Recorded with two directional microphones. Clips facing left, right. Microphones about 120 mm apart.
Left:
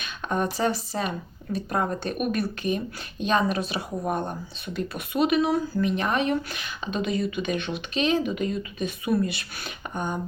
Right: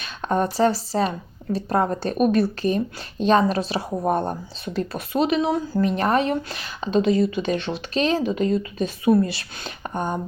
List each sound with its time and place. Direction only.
0.0 s speech: 35° right (ahead or behind)
5.8 s speech: 40° right (ahead or behind)